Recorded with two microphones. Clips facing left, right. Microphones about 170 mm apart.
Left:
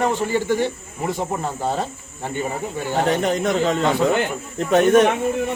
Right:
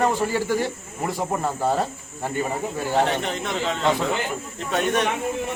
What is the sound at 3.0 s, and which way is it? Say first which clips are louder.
A man's voice: left 6 dB; 40° left (ahead or behind).